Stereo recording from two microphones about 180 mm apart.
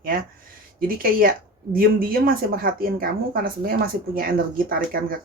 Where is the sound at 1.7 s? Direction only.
55° right (ahead or behind).